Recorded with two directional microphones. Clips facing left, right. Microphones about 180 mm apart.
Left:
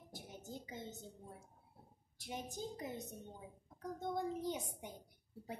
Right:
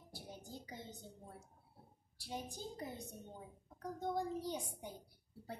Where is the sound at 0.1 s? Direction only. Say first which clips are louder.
Left 1 dB; 20° left (ahead or behind).